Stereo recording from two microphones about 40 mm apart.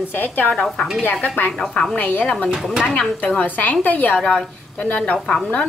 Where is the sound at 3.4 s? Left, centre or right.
Left.